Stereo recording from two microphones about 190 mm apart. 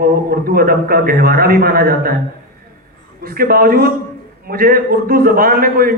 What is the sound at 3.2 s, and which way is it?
A man's voice, 50° right (ahead or behind).